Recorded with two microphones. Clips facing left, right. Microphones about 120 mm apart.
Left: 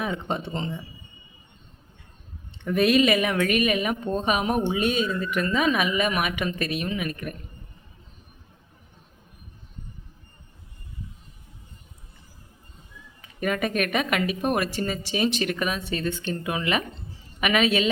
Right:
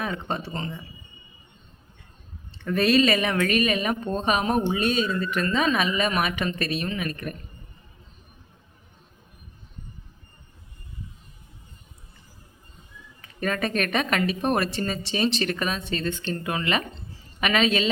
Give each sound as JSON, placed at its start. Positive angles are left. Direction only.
{"t": 0.3, "sound": "speech", "side_deg": 20}
{"t": 2.6, "sound": "a woman's voice", "side_deg": 15}
{"t": 13.2, "sound": "a woman's voice", "side_deg": 10}